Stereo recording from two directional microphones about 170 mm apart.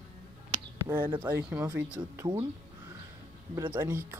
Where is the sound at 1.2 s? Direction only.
15° right (ahead or behind).